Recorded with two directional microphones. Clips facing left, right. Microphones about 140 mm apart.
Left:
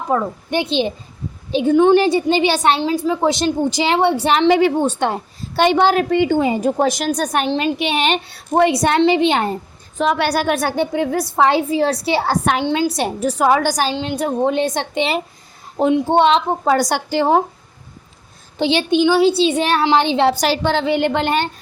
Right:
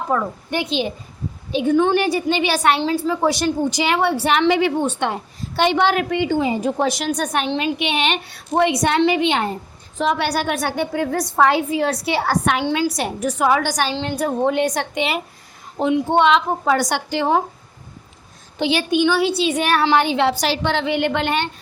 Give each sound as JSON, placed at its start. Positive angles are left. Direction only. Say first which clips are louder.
{"t": 0.1, "sound": "a woman's voice", "louder": "left 4 dB", "side_deg": 25}
{"t": 10.0, "sound": "a woman's voice", "louder": "left 2 dB", "side_deg": 60}
{"t": 10.2, "sound": "a woman's voice", "louder": "left 3 dB", "side_deg": 45}
{"t": 10.9, "sound": "a woman's voice", "louder": "left 2 dB", "side_deg": 20}
{"t": 13.9, "sound": "a woman's voice", "louder": "left 1 dB", "side_deg": 15}
{"t": 18.6, "sound": "a woman's voice", "louder": "left 3 dB", "side_deg": 25}
{"t": 20.4, "sound": "a woman's voice", "louder": "left 3 dB", "side_deg": 40}